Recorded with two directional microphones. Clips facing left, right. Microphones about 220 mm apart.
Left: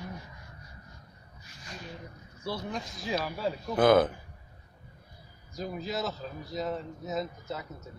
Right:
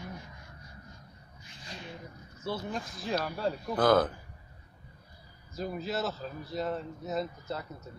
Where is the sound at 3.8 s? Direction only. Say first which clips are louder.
Left 3 dB; 25° left (ahead or behind).